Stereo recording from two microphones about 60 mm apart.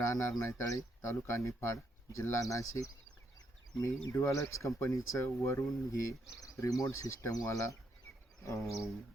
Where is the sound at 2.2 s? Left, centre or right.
Left.